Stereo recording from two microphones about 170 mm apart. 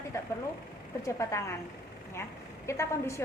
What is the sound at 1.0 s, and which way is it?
Speech, 15° left (ahead or behind).